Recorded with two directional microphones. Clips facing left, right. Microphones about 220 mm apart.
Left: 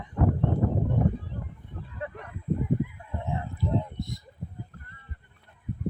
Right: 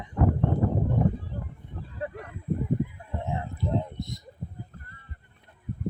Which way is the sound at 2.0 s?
35° right (ahead or behind).